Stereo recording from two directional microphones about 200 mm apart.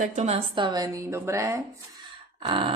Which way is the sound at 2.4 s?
25° right (ahead or behind).